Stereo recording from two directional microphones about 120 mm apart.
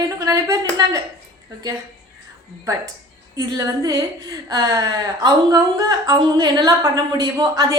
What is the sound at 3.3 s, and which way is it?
A woman's voice, 30° right (ahead or behind).